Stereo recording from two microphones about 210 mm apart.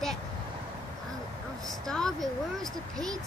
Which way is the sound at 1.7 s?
Centre (ahead or behind).